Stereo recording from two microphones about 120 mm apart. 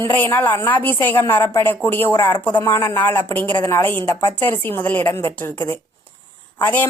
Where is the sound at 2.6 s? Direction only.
25° left (ahead or behind).